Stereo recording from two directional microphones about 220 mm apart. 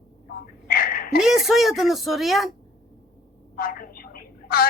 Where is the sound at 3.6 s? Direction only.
40° left (ahead or behind).